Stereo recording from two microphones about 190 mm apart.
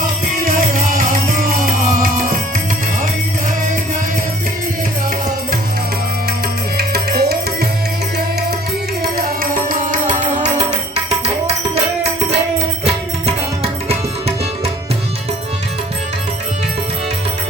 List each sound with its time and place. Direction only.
0.0 s music: 45° right (ahead or behind)
6.7 s tabla: 55° right (ahead or behind)
9.1 s music: 45° right (ahead or behind)
12.8 s music: 30° right (ahead or behind)